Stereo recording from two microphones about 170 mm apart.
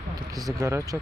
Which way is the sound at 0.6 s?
20° right (ahead or behind).